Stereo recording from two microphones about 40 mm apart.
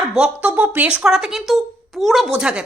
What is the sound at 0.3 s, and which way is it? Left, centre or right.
Speech, right.